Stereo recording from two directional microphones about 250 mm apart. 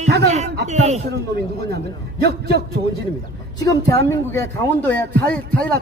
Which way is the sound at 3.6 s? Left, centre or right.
Centre.